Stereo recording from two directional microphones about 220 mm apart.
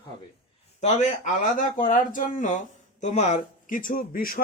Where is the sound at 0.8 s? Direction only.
30° left (ahead or behind).